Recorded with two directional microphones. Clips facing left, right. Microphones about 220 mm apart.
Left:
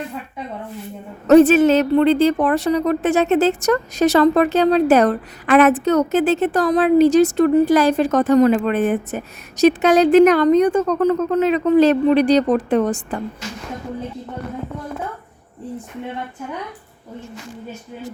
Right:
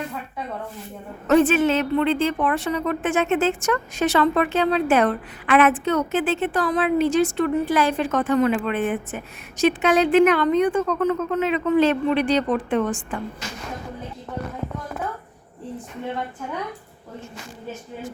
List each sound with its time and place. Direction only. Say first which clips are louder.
1.3 s a woman's voice: left 7 dB; 40° left (ahead or behind)